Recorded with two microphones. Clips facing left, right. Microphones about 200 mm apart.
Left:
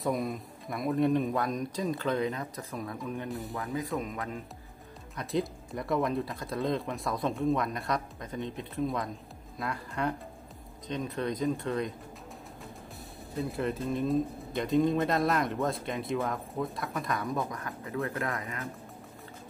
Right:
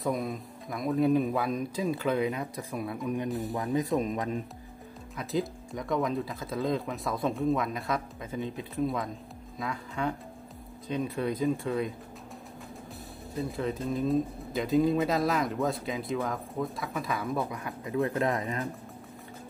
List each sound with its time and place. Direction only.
0.0 s speech: centre (ahead or behind); by 4.4 s 20° right (ahead or behind)
5.1 s speech: centre (ahead or behind)
13.4 s speech: centre (ahead or behind); by 18.7 s 25° right (ahead or behind)